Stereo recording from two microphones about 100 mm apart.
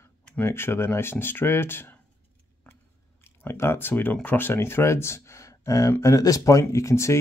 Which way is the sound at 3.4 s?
25° left (ahead or behind).